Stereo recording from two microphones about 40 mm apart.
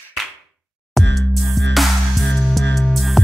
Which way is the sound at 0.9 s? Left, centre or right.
Centre.